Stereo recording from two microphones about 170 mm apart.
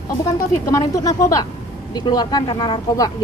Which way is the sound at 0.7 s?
20° left (ahead or behind).